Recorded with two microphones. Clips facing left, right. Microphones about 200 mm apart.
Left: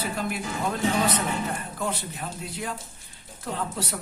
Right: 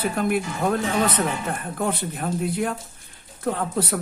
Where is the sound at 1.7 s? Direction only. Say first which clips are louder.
Right 5 dB; 55° right (ahead or behind).